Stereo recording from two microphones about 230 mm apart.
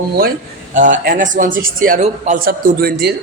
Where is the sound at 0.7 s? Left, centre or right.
Right.